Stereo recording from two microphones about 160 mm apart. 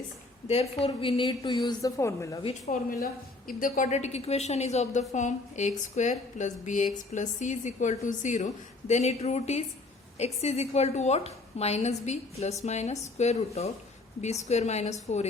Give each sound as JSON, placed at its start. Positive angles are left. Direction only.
{"t": 0.4, "sound": "a woman's voice", "side_deg": 40}
{"t": 2.4, "sound": "a woman's voice", "side_deg": 40}
{"t": 3.0, "sound": "a woman's voice", "side_deg": 60}